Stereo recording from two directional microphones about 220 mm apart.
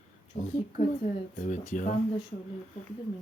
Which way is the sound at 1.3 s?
35° left (ahead or behind).